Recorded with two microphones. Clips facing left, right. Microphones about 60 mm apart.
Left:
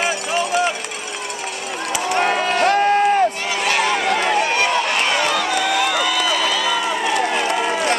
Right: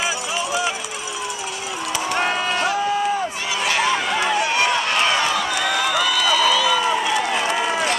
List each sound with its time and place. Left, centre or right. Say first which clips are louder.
0.0 s run: left 3 dB; left
2.1 s run: left 4 dB; left
7.1 s run: left 2 dB; left